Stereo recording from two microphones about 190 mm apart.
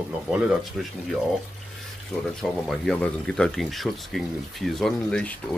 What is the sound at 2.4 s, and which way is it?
Speech, 5° left (ahead or behind).